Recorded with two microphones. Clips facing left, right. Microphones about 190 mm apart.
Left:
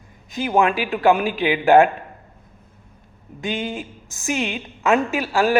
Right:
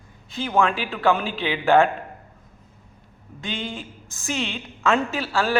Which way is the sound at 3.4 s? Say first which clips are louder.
Left 5 dB; 15° left (ahead or behind).